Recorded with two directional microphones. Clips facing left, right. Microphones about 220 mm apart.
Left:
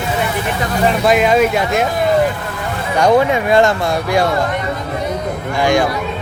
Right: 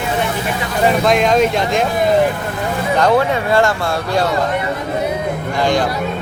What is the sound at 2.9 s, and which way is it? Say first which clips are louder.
Speech: left 3 dB; 15° left (ahead or behind).